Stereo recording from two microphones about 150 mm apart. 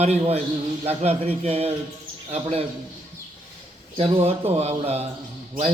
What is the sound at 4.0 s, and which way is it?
A man's voice, 40° right (ahead or behind).